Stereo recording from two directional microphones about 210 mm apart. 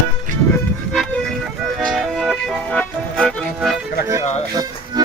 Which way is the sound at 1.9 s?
Centre (ahead or behind).